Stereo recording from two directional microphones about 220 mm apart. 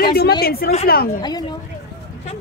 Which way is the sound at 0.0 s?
45° left (ahead or behind).